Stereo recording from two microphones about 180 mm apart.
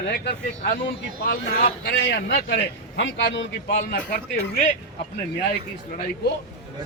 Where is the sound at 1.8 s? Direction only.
60° left (ahead or behind); by 4.2 s 80° left.